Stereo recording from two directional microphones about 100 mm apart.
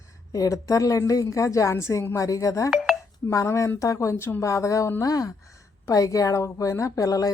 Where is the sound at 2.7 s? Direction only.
5° right (ahead or behind).